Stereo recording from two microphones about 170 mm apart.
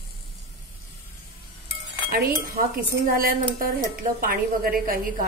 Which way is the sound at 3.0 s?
60° right (ahead or behind).